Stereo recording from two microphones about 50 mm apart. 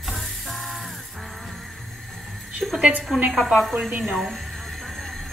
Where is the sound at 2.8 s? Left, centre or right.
Right.